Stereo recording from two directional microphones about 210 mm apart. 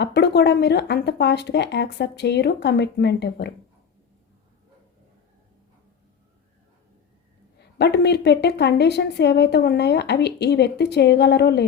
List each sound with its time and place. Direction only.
0.0 s a woman's voice: 50° left (ahead or behind)
7.8 s a woman's voice: 50° left (ahead or behind)